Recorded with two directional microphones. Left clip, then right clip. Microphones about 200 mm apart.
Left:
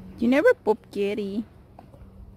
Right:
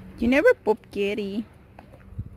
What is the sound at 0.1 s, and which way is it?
Speech, centre (ahead or behind).